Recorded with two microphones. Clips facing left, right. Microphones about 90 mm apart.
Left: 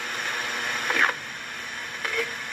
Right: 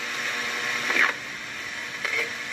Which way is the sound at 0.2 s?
50° left (ahead or behind).